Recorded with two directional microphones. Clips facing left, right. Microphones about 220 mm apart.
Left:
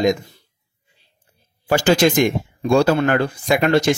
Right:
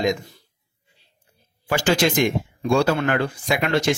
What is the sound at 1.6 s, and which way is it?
Speech, 45° left (ahead or behind).